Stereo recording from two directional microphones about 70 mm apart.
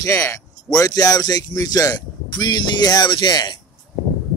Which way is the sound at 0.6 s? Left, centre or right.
Left.